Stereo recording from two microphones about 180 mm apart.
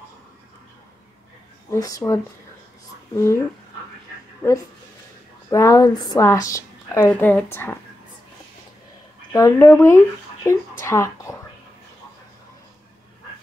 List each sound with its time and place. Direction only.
1.7 s speech: 20° left (ahead or behind)
4.4 s a woman's voice: 15° left (ahead or behind)
9.3 s speech: 15° left (ahead or behind)